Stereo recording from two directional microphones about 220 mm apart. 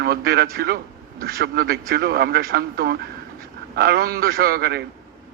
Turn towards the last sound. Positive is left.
turn(degrees=-45)  # may be behind; listen again after turning